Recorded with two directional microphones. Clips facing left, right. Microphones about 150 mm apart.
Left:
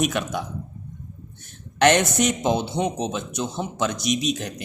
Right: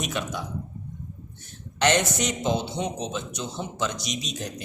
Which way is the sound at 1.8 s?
55° left (ahead or behind).